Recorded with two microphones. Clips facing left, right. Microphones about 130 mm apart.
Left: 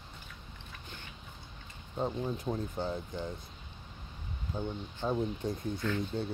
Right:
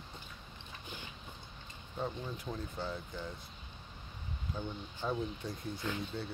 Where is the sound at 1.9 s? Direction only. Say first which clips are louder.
Left 6 dB; 25° left (ahead or behind).